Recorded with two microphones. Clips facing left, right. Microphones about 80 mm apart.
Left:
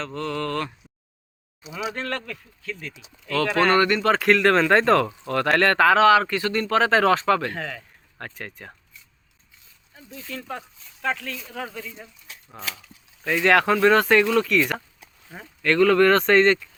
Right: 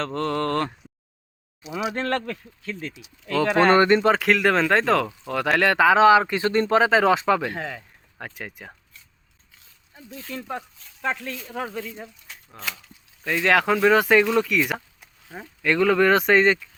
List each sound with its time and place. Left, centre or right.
0.0 s speech: right
1.7 s speech: right
3.3 s speech: centre
4.1 s speech: centre
10.3 s speech: right
13.4 s speech: centre